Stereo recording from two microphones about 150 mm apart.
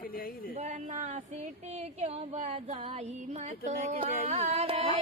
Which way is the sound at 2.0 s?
45° right (ahead or behind).